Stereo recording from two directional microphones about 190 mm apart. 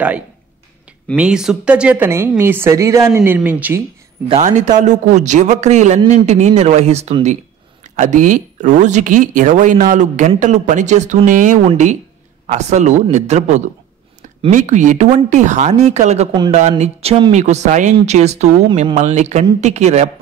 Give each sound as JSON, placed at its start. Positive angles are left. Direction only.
{"t": 1.1, "sound": "a woman's voice", "side_deg": -5}
{"t": 4.3, "sound": "speech", "side_deg": -35}